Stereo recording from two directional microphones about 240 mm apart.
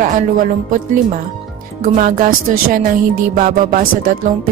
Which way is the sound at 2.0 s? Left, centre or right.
Right.